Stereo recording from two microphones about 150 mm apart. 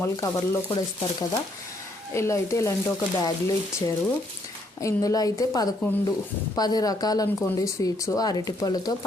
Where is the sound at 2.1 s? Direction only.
20° left (ahead or behind).